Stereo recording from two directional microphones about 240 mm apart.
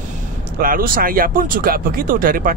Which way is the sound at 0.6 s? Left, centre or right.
Right.